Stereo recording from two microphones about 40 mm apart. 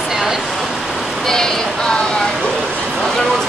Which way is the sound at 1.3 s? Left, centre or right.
Centre.